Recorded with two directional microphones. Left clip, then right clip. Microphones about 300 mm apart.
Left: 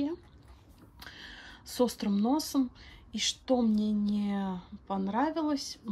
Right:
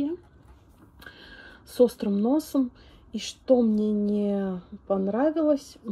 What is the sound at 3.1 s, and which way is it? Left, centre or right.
Speech, left.